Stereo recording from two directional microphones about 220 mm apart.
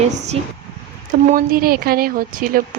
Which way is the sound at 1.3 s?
40° right (ahead or behind).